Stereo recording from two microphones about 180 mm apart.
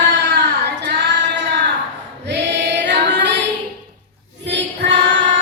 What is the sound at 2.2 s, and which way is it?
Choir, 75° right (ahead or behind).